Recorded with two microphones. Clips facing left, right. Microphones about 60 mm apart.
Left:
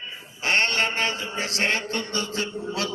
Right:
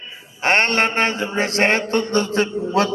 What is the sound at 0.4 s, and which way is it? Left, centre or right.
A man's voice, right.